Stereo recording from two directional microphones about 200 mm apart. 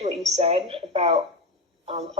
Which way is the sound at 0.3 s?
25° right (ahead or behind).